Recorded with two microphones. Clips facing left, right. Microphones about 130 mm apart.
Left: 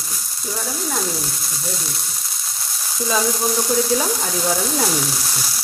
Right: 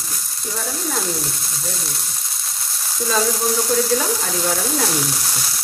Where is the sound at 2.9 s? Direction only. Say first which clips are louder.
Even; centre (ahead or behind).